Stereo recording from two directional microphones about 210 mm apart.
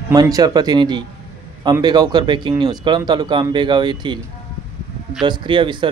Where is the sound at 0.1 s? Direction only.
15° right (ahead or behind).